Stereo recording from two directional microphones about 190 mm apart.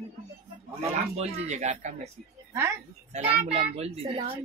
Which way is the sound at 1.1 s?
35° right (ahead or behind).